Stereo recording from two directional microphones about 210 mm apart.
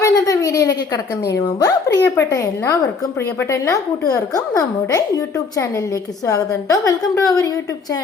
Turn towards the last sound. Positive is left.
turn(degrees=15)  # may be behind; listen again after turning